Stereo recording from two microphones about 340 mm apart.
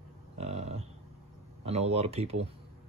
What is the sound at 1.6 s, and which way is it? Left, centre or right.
Speech, centre.